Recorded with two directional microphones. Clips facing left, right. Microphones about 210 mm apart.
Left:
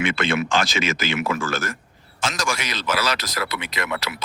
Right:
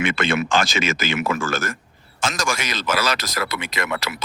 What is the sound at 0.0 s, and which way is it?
Speech, 45° right (ahead or behind).